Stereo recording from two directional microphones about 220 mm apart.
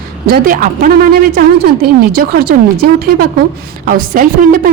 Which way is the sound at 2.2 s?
45° right (ahead or behind).